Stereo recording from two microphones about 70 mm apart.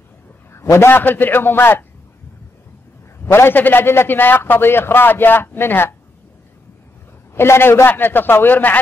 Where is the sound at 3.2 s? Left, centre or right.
Left.